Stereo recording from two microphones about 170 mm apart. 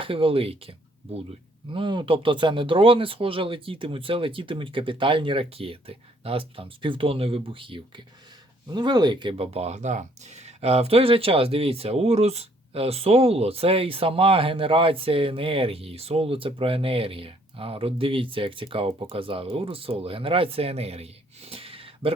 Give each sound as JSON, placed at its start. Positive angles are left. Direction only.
{"t": 0.0, "sound": "speech", "side_deg": -30}